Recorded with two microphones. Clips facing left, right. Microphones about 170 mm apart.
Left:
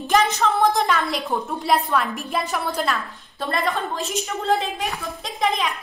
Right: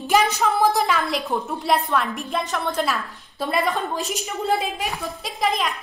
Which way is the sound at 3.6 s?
15° right (ahead or behind).